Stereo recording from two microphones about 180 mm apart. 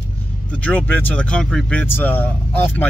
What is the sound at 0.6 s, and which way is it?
A man's voice, 10° left (ahead or behind).